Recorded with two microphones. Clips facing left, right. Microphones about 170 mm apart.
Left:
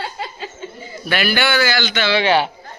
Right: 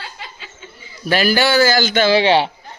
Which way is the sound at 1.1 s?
40° right (ahead or behind).